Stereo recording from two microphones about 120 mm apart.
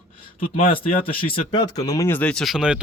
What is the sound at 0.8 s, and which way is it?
Speech, 45° left (ahead or behind).